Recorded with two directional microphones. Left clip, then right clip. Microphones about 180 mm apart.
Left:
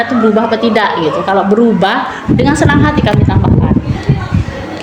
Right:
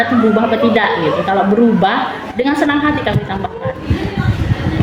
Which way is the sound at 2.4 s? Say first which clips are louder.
Left 3 dB; 55° left (ahead or behind).